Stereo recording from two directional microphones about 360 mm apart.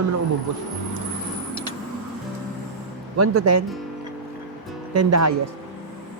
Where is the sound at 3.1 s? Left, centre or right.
Right.